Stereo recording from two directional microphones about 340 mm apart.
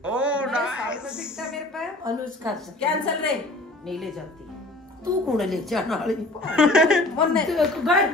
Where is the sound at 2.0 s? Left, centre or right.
Centre.